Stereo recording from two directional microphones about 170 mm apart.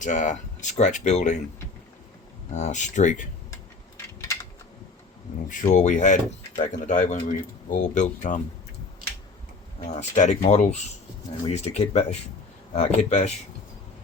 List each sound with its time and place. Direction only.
0.0 s speech: 45° left (ahead or behind)
2.6 s speech: 45° left (ahead or behind)
3.5 s a sound: 20° left (ahead or behind)
5.5 s speech: 45° left (ahead or behind)
9.8 s speech: 40° left (ahead or behind)